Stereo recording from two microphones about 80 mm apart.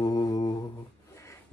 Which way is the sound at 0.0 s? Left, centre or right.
Left.